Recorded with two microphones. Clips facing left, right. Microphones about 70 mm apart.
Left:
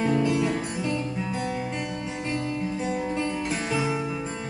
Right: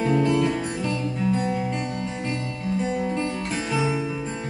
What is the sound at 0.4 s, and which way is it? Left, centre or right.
Music, centre.